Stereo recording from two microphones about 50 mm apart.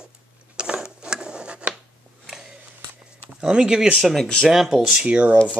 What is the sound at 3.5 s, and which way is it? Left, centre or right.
Speech, centre.